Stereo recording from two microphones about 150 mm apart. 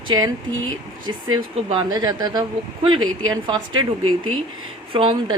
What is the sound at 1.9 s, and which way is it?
Speech, 25° right (ahead or behind).